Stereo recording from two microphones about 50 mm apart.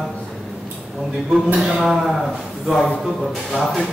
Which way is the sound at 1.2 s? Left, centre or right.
Centre.